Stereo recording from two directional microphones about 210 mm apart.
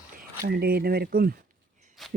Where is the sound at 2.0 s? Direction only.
Centre (ahead or behind).